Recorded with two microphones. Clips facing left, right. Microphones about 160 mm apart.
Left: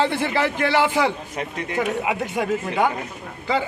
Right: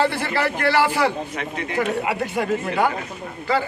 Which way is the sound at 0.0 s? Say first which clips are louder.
Even; 20° left (ahead or behind).